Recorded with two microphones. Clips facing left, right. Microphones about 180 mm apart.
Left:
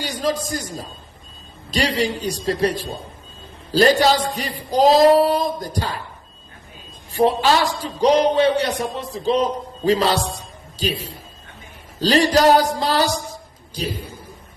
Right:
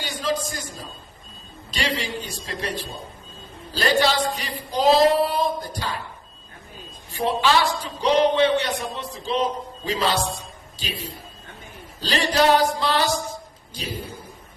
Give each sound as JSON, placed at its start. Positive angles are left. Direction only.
{"t": 0.0, "sound": "a man's voice", "side_deg": 40}
{"t": 7.1, "sound": "a man's voice", "side_deg": 40}